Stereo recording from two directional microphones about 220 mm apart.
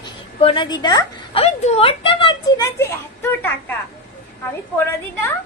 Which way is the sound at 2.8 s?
10° left (ahead or behind).